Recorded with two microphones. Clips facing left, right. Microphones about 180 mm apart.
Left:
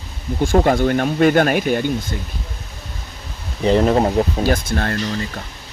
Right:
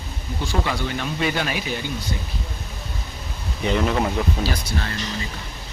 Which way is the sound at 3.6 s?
35° left (ahead or behind).